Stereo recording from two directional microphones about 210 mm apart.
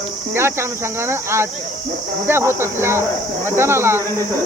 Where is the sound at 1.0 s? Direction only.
10° right (ahead or behind).